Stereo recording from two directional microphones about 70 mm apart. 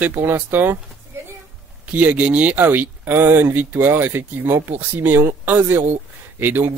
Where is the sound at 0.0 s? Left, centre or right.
Right.